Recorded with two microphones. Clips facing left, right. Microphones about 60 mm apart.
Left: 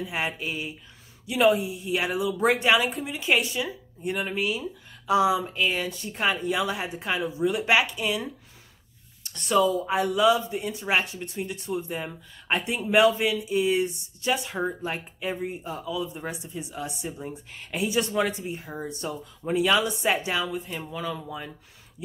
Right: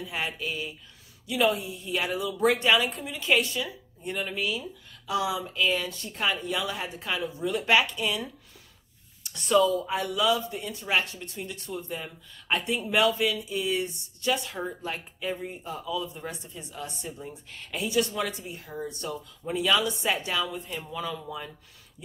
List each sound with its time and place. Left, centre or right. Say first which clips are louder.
0.0 s speech: left 3 dB; left
2.7 s speech: left 2 dB; centre
9.2 s a sound: left 1 dB; centre
9.5 s speech: even; centre
20.4 s speech: left 3 dB; centre